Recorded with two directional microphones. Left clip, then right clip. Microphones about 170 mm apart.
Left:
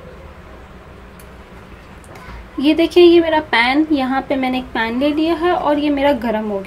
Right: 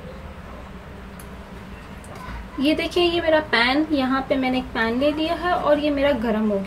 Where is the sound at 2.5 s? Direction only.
30° left (ahead or behind).